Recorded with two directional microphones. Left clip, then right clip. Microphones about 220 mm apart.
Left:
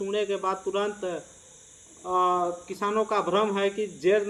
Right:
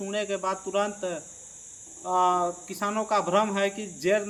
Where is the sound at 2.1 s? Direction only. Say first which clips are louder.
Right 1 dB; 20° right (ahead or behind).